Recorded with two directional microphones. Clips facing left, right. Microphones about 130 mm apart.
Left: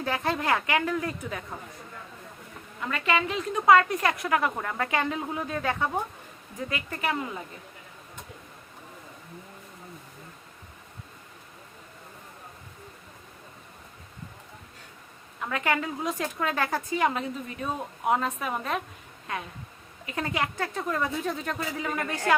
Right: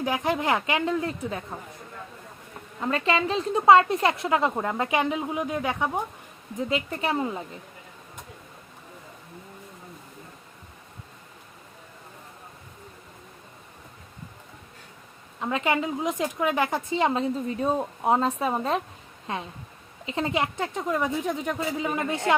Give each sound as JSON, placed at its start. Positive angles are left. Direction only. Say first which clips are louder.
{"t": 0.0, "sound": "a woman's voice", "louder": "right 3 dB", "side_deg": -15}
{"t": 2.8, "sound": "a woman's voice", "louder": "right 3 dB", "side_deg": -30}
{"t": 15.4, "sound": "a woman's voice", "louder": "right 3 dB", "side_deg": -25}